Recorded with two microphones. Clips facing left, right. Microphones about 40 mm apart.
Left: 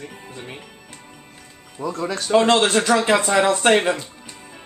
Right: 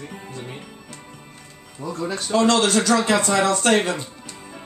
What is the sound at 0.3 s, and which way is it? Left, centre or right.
Music, left.